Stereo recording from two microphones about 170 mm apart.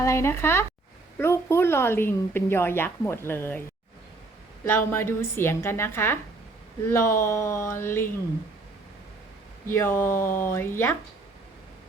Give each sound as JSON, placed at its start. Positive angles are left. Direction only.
{"t": 0.0, "sound": "a woman's voice", "side_deg": 15}
{"t": 4.6, "sound": "a woman's voice", "side_deg": 15}
{"t": 9.7, "sound": "a woman's voice", "side_deg": 15}